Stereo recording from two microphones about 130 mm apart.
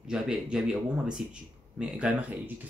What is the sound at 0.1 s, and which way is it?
Speech, 5° right (ahead or behind).